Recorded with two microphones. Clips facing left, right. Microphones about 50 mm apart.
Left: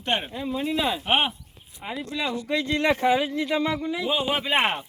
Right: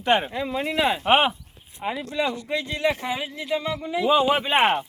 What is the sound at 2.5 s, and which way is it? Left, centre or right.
Speech, centre.